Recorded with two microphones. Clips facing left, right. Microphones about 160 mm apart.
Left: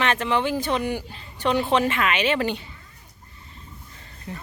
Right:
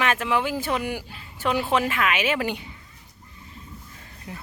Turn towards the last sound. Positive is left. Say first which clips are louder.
# left 3 dB
turn(degrees=-10)  # may be behind; listen again after turning